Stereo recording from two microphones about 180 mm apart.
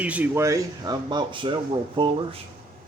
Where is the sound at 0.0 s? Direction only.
10° right (ahead or behind); by 2.4 s 30° right (ahead or behind).